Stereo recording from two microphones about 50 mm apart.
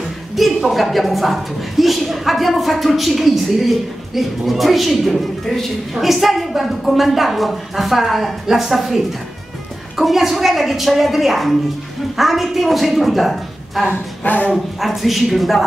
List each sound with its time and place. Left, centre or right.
0.4 s a woman's voice: centre
14.2 s speech: left
14.8 s a woman's voice: centre